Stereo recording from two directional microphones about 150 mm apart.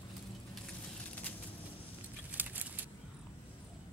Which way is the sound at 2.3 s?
10° right (ahead or behind).